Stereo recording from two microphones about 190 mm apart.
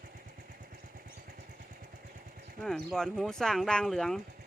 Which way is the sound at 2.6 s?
Centre (ahead or behind).